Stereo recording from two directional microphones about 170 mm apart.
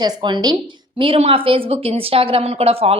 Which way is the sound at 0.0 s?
25° right (ahead or behind).